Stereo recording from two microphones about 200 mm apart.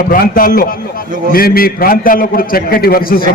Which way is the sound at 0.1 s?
45° left (ahead or behind).